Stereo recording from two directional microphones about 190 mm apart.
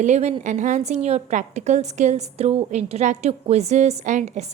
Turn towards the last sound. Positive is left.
turn(degrees=-35)  # may be behind; listen again after turning